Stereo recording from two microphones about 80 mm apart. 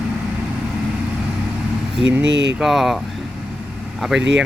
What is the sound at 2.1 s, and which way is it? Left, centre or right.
Speech, centre.